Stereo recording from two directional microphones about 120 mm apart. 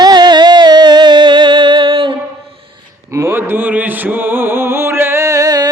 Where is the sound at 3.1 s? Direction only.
25° right (ahead or behind).